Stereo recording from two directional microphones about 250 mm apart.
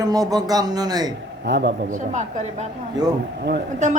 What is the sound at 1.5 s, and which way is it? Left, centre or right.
Speech, right.